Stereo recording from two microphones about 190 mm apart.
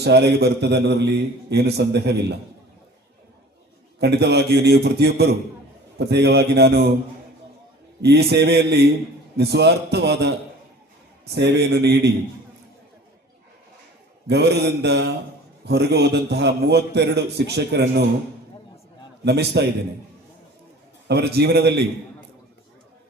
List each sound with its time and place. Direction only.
0.0 s a man's voice: 60° right (ahead or behind)
4.0 s a man's voice: 60° right (ahead or behind)
8.0 s a man's voice: 60° right (ahead or behind)
14.3 s a man's voice: 65° right (ahead or behind)
19.2 s a man's voice: 60° right (ahead or behind)
21.1 s a man's voice: 60° right (ahead or behind)